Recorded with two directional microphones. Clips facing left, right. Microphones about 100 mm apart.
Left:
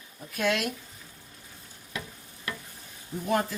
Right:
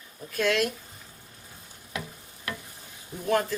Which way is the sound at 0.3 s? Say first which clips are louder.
Right 2 dB; 10° left (ahead or behind).